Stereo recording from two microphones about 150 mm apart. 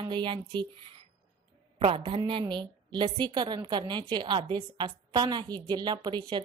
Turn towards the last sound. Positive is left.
turn(degrees=-30)  # may be behind; listen again after turning